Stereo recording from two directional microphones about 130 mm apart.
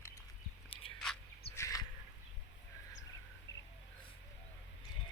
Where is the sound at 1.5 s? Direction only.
25° left (ahead or behind).